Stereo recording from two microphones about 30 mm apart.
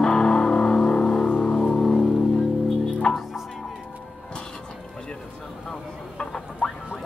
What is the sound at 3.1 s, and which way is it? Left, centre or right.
Music, left.